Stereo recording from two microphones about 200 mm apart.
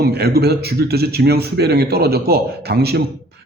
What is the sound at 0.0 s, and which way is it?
A man's voice, 50° right (ahead or behind).